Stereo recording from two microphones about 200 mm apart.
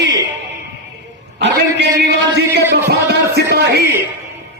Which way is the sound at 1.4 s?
60° right (ahead or behind).